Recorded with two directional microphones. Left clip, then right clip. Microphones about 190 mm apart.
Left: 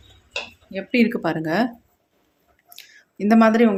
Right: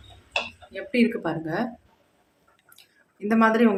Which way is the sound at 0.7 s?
30° left (ahead or behind).